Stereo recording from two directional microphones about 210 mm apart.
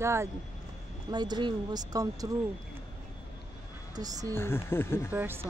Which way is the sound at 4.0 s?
15° right (ahead or behind).